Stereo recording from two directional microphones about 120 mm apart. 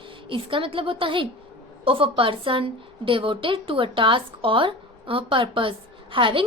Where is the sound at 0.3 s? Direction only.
45° right (ahead or behind).